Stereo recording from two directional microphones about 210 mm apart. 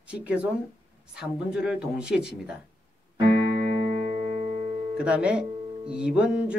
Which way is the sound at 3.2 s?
55° left (ahead or behind).